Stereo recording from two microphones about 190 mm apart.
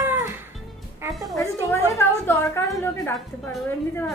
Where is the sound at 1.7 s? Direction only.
15° left (ahead or behind).